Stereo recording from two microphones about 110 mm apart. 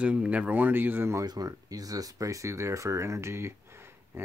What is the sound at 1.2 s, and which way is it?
Speech, 35° right (ahead or behind).